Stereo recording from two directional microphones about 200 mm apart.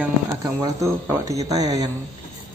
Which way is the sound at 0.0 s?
15° right (ahead or behind).